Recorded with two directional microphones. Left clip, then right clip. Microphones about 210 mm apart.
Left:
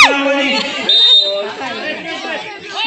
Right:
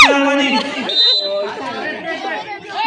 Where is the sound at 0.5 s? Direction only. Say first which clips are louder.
Left 4 dB; 50° right (ahead or behind).